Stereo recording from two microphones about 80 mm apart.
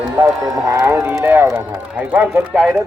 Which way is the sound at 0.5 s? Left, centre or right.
Right.